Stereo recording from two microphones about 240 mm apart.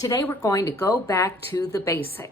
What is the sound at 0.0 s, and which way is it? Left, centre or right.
Speech, centre.